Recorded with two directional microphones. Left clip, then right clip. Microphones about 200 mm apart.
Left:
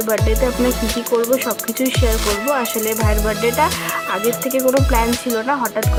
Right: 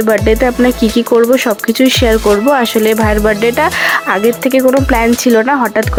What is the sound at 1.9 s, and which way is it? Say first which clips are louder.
Speech: right 9 dB; 30° right (ahead or behind).